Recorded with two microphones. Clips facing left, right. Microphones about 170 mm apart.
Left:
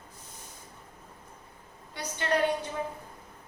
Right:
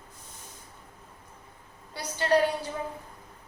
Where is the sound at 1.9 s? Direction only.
35° right (ahead or behind).